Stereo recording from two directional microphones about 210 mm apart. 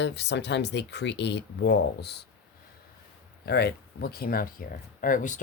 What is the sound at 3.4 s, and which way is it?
Speech, 50° left (ahead or behind).